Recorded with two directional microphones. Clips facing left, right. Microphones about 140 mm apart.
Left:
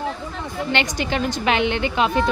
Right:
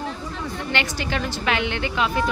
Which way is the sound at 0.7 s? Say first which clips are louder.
Left 4 dB; 20° left (ahead or behind).